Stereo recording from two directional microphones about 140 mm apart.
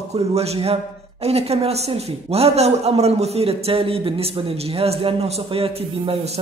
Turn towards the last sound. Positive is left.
turn(degrees=-45)  # may be behind; listen again after turning